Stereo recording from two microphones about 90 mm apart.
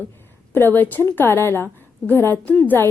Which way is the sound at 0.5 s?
20° left (ahead or behind).